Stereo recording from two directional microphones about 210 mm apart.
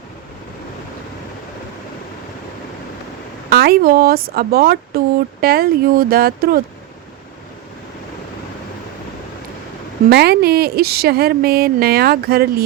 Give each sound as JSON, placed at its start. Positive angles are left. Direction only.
{"t": 3.5, "sound": "speech", "side_deg": -45}
{"t": 10.1, "sound": "speech", "side_deg": -50}